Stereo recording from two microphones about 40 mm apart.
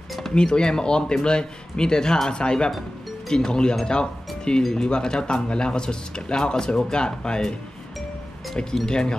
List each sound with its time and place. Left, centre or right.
0.3 s speech: left
8.8 s speech: centre